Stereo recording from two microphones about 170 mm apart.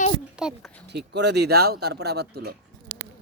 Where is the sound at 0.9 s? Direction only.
85° right; by 2.6 s 70° right (ahead or behind).